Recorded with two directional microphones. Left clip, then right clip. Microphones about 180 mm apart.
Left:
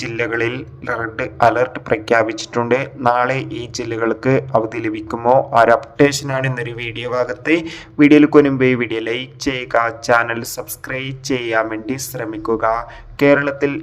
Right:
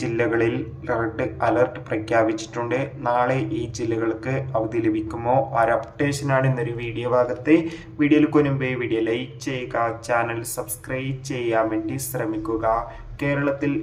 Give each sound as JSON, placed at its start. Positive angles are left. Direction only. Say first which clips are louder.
{"t": 0.0, "sound": "a man's voice", "louder": "left 2 dB", "side_deg": 45}